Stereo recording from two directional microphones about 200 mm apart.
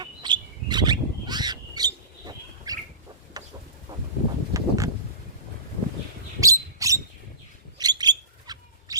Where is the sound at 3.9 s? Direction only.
15° right (ahead or behind).